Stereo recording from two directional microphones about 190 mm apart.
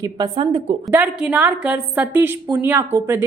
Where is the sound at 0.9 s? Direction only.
10° right (ahead or behind).